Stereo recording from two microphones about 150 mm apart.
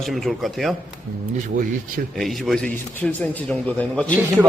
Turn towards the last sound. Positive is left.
turn(degrees=5)  # may be behind; listen again after turning